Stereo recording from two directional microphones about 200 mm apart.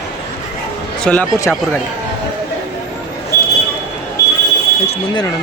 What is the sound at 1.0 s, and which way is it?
Speech, 5° left (ahead or behind).